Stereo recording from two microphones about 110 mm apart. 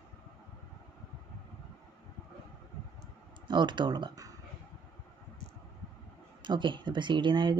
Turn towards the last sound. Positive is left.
turn(degrees=-45)  # may be behind; listen again after turning